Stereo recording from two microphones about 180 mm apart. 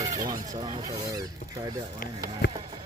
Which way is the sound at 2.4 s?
70° left (ahead or behind).